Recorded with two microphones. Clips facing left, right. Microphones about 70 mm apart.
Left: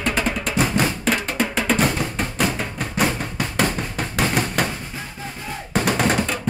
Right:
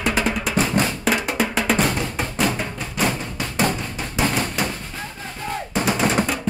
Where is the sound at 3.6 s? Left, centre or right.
Left.